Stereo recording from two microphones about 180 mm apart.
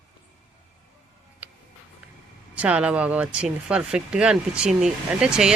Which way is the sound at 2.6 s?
5° right (ahead or behind).